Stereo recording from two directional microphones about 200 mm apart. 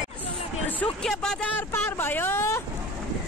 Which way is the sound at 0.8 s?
5° left (ahead or behind).